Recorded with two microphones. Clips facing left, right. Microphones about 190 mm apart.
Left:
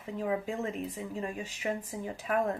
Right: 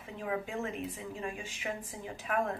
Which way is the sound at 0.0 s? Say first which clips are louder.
Left 4 dB; 35° left (ahead or behind).